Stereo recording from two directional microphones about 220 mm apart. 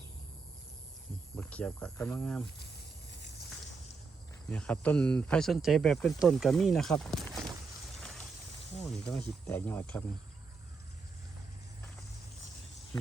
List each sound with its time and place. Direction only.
1.4 s speech: 5° left (ahead or behind)
3.1 s a sound: 50° left (ahead or behind)
4.4 s speech: 5° left (ahead or behind)
9.0 s speech: 5° left (ahead or behind)